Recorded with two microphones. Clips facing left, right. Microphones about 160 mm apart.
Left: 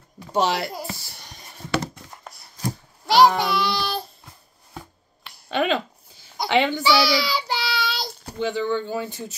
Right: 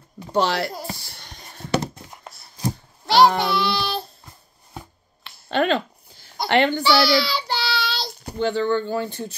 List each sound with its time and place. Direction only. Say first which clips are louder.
0.3 s speech: right 1 dB; centre (ahead or behind)
3.1 s child singing: even; centre (ahead or behind)
5.2 s a sound: right 2 dB; 5° left (ahead or behind)
8.4 s speech: right 3 dB; centre (ahead or behind)